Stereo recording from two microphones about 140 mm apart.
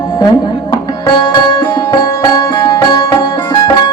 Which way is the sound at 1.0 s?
30° left (ahead or behind).